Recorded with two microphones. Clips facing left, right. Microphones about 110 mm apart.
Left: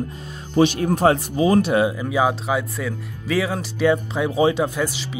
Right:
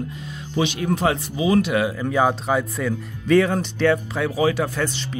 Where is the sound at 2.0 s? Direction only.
5° left (ahead or behind).